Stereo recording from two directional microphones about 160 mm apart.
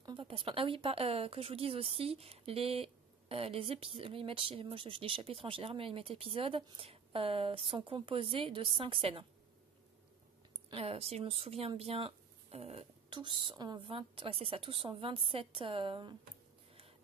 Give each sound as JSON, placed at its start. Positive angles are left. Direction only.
{"t": 0.0, "sound": "a woman's voice", "side_deg": -30}
{"t": 10.7, "sound": "a woman's voice", "side_deg": -40}